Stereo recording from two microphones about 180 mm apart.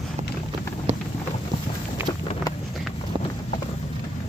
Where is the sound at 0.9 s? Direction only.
30° right (ahead or behind).